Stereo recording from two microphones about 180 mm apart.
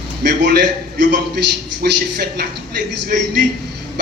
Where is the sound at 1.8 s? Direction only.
65° right (ahead or behind).